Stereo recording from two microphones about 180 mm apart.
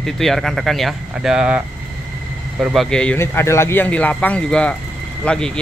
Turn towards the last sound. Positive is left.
turn(degrees=5)  # may be behind; listen again after turning